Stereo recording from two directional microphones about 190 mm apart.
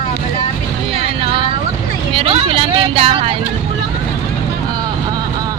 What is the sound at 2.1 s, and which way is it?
Vehicle, 30° right (ahead or behind).